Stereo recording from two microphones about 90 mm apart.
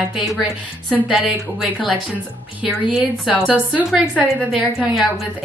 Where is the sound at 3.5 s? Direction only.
15° right (ahead or behind).